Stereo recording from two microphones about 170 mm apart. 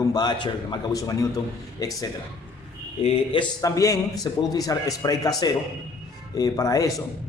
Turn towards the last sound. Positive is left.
turn(degrees=20)  # may be behind; listen again after turning